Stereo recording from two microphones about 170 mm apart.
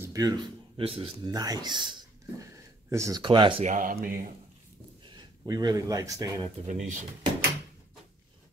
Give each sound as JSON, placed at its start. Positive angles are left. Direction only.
{"t": 0.0, "sound": "speech", "side_deg": -20}
{"t": 1.3, "sound": "speech", "side_deg": -20}
{"t": 3.6, "sound": "speech", "side_deg": -50}
{"t": 5.4, "sound": "speech", "side_deg": -20}
{"t": 6.6, "sound": "speech", "side_deg": -45}